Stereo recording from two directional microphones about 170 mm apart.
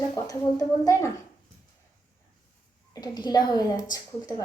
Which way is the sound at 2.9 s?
25° left (ahead or behind).